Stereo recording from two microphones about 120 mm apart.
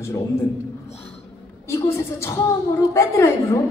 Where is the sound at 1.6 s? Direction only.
20° left (ahead or behind).